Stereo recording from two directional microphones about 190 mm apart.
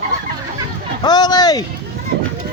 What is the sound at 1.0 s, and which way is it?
Speech, 20° left (ahead or behind).